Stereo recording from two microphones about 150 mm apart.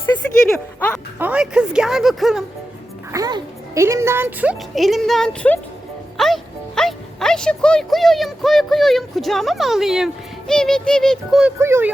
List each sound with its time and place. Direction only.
0.4 s speech: 5° left (ahead or behind)
1.2 s speech: 10° right (ahead or behind)
3.1 s speech: 25° right (ahead or behind)
4.7 s speech: centre (ahead or behind)
11.6 s speech: 15° right (ahead or behind)